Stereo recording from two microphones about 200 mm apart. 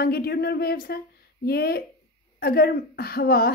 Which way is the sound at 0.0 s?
50° left (ahead or behind).